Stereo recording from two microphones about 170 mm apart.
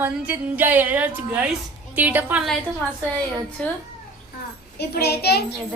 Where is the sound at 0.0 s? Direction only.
10° right (ahead or behind).